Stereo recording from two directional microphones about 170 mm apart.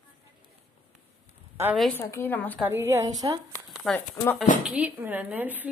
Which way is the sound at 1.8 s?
5° left (ahead or behind).